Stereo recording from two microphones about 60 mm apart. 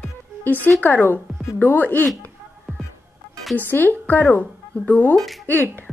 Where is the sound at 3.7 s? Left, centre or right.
Left.